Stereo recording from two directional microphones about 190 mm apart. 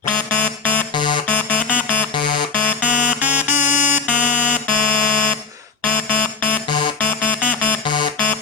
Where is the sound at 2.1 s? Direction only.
25° left (ahead or behind).